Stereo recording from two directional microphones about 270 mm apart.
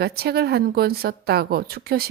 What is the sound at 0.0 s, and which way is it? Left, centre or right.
Speech, right.